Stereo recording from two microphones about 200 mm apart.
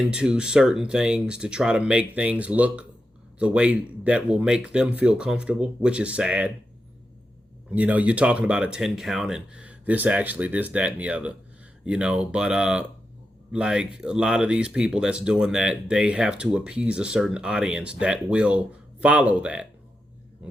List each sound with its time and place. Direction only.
0.0 s speech: 5° right (ahead or behind)
7.7 s speech: 5° right (ahead or behind)